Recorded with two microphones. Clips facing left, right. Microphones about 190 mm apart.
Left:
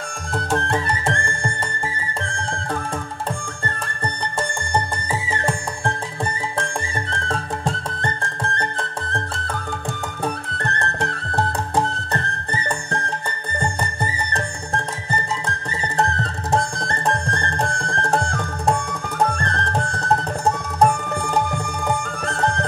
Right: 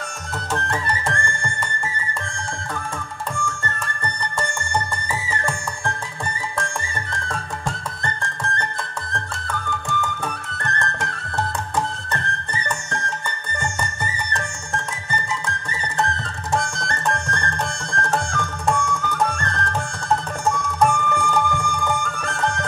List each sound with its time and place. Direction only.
0.5 s music: 25° left (ahead or behind)
3.4 s music: 30° left (ahead or behind)
7.1 s music: 30° left (ahead or behind)
14.3 s music: 35° left (ahead or behind)